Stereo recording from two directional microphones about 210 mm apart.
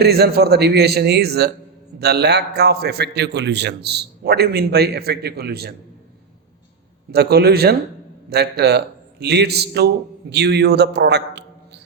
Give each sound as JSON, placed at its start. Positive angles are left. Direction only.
{"t": 0.0, "sound": "a man's voice", "side_deg": -50}
{"t": 7.1, "sound": "a man's voice", "side_deg": -50}